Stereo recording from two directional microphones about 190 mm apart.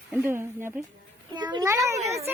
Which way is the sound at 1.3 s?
25° right (ahead or behind).